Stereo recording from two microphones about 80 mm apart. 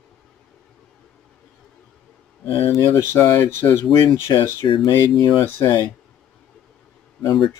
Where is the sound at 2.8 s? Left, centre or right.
Left.